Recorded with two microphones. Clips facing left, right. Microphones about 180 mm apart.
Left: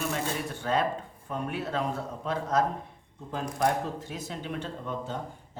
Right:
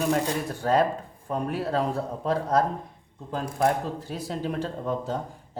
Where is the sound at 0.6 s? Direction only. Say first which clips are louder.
Right 5 dB; 40° right (ahead or behind).